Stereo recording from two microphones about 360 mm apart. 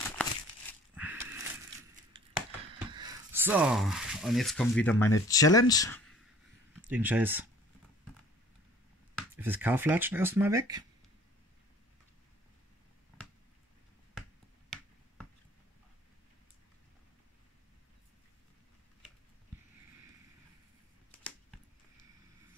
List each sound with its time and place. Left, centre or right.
0.2 s crumpling: centre
0.9 s a sound: centre
2.9 s speech: centre
6.9 s speech: centre
9.4 s speech: centre